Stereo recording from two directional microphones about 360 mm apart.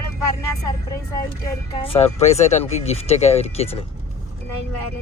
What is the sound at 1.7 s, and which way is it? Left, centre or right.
Speech, centre.